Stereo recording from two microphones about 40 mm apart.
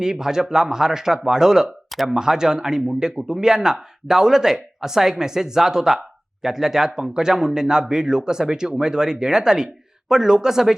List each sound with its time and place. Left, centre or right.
0.0 s a man's voice: centre
1.9 s a sound: centre
2.1 s a man's voice: centre